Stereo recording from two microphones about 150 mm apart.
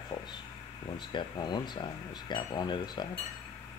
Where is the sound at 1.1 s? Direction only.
30° left (ahead or behind).